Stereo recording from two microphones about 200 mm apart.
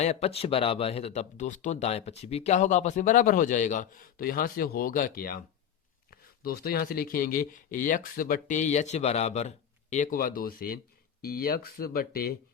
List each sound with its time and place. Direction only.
0.0 s speech: 30° left (ahead or behind); by 12.4 s 50° left (ahead or behind)